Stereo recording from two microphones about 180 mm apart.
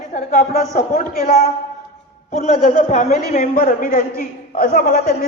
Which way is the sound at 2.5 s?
40° left (ahead or behind).